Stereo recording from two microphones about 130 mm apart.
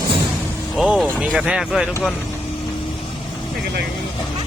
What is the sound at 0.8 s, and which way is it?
Speech, 5° right (ahead or behind).